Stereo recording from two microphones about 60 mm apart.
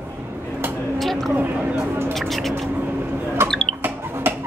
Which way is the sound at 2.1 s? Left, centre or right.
Centre.